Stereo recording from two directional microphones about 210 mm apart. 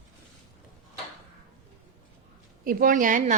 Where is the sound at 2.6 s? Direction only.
40° right (ahead or behind).